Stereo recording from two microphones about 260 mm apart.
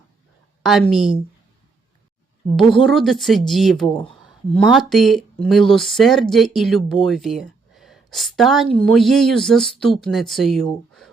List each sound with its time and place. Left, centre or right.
0.6 s speech: centre
2.7 s speech: centre
3.9 s speech: centre
4.5 s speech: centre